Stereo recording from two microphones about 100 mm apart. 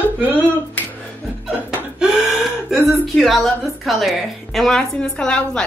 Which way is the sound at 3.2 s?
Centre (ahead or behind).